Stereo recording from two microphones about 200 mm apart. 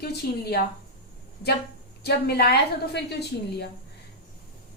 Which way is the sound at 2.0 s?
50° left (ahead or behind).